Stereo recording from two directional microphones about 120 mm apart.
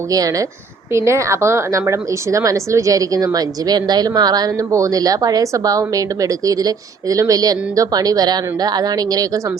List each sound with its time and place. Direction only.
0.1 s a woman's voice: 30° right (ahead or behind)